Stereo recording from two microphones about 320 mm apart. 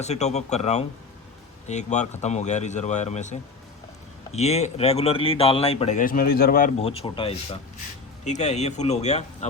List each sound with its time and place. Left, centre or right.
0.0 s speech: left